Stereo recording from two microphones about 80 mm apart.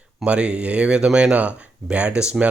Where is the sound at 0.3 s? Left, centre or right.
Centre.